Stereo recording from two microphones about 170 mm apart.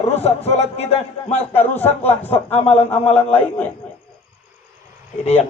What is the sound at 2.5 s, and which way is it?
Speech, 40° left (ahead or behind).